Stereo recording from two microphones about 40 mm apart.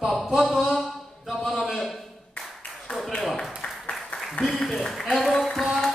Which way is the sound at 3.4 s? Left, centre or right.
Centre.